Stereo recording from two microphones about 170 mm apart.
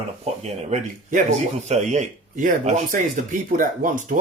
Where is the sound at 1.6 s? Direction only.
40° right (ahead or behind).